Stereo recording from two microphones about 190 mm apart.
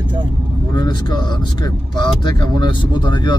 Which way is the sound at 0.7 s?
20° left (ahead or behind).